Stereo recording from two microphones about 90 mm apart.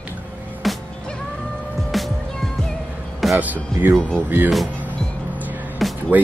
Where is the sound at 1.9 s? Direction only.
Centre (ahead or behind).